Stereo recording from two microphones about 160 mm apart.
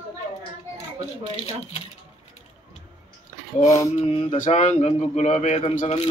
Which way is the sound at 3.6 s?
20° left (ahead or behind).